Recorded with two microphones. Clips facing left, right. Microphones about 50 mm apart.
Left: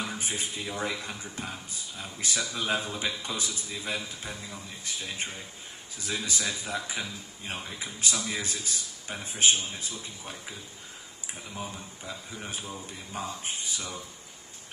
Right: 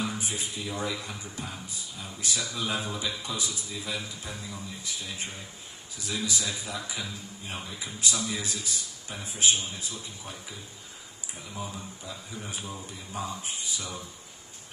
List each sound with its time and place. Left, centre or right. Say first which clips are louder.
0.1 s a man's voice: even; left
11.5 s a man's voice: right 2 dB; left